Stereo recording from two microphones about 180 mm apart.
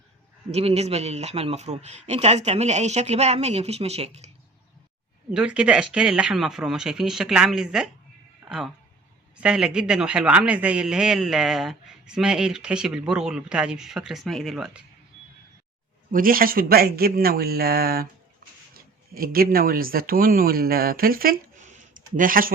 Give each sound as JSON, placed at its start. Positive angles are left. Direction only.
{"t": 0.5, "sound": "speech", "side_deg": -35}
{"t": 5.3, "sound": "a man's voice", "side_deg": -5}
{"t": 16.1, "sound": "speech", "side_deg": -50}